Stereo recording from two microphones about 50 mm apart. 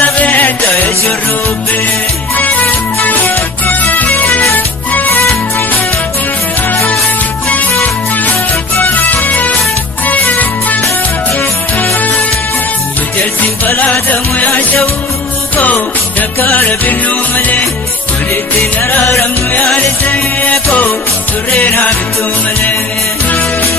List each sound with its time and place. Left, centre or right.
0.0 s music: left
2.3 s music: left
7.4 s music: left
9.0 s music: left
13.8 s music: left
16.4 s music: left
20.1 s music: left